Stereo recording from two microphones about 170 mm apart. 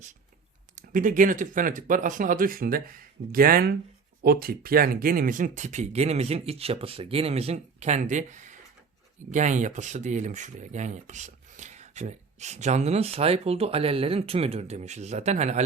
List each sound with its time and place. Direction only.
0.8 s speech: 50° right (ahead or behind)